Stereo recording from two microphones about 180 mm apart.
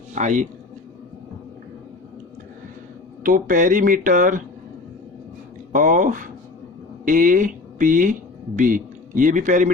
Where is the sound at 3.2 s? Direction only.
50° right (ahead or behind).